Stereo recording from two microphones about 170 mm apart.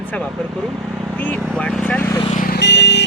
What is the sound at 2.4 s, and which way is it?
Vehicle, 70° left (ahead or behind).